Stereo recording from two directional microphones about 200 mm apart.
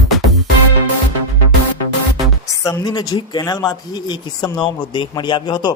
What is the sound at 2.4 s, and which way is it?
Speech, 15° left (ahead or behind).